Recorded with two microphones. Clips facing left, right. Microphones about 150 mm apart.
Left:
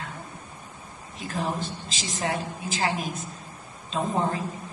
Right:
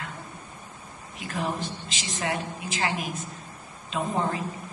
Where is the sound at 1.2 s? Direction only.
35° left (ahead or behind).